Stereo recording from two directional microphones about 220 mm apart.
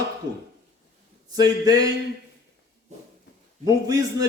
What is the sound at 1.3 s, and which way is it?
Speech, 15° right (ahead or behind).